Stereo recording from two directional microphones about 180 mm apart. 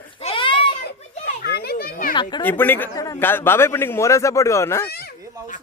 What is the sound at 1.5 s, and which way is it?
Children playing, 60° left (ahead or behind).